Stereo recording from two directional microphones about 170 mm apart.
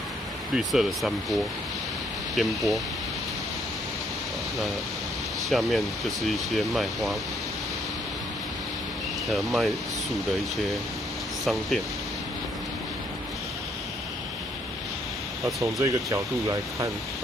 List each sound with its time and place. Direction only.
0.5 s speech: centre (ahead or behind)
5.5 s speech: centre (ahead or behind)
9.2 s speech: centre (ahead or behind)
15.4 s speech: 20° right (ahead or behind)